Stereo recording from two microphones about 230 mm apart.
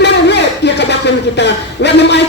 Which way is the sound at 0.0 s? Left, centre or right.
Left.